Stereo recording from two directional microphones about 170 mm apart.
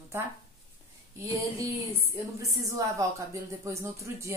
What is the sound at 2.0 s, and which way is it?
Speech, 20° right (ahead or behind).